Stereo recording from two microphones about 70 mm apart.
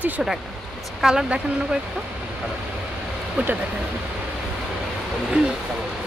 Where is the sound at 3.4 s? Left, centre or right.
Centre.